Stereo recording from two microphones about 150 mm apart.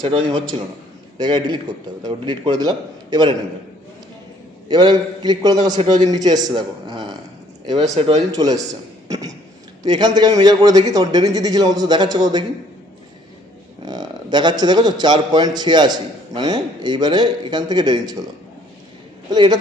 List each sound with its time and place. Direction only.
0.0 s a man's voice: 30° right (ahead or behind)
4.7 s a man's voice: 30° right (ahead or behind)
5.7 s speech: 50° right (ahead or behind)
6.2 s a man's voice: 25° right (ahead or behind)
7.9 s a man's voice: 40° right (ahead or behind)
8.3 s a man's voice: 25° right (ahead or behind)
13.8 s a man's voice: 30° right (ahead or behind)
19.3 s a man's voice: 30° right (ahead or behind)